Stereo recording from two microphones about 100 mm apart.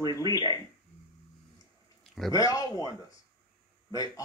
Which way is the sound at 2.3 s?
40° left (ahead or behind).